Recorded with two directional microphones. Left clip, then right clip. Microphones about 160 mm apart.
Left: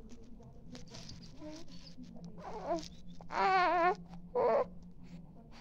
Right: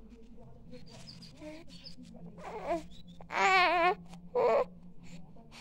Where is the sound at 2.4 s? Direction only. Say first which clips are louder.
Right 2 dB; 30° right (ahead or behind).